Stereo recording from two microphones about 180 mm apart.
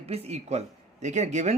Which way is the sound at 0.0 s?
35° right (ahead or behind).